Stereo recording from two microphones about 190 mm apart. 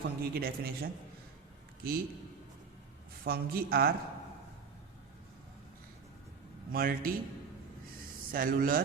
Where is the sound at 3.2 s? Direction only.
50° right (ahead or behind).